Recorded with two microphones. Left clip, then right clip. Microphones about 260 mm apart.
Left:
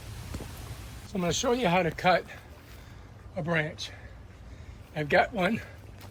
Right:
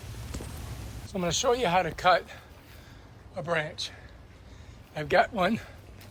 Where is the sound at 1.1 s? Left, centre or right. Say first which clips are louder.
Right 1 dB; centre.